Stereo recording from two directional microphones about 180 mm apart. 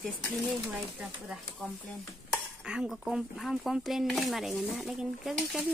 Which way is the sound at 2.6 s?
5° right (ahead or behind).